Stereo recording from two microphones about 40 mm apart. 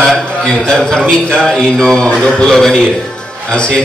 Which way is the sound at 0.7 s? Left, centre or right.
Centre.